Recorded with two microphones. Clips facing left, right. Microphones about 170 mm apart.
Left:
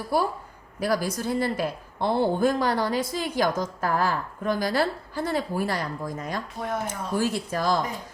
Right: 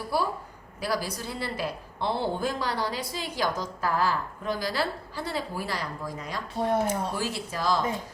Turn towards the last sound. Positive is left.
turn(degrees=50)  # may be behind; listen again after turning